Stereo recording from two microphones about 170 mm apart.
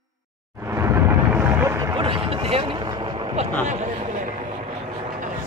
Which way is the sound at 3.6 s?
45° right (ahead or behind).